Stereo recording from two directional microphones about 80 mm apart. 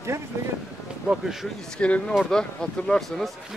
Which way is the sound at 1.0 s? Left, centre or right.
Centre.